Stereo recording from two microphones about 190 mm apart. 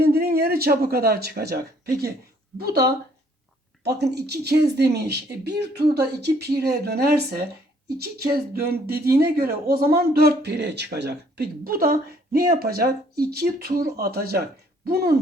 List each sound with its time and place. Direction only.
0.0 s speech: 55° right (ahead or behind)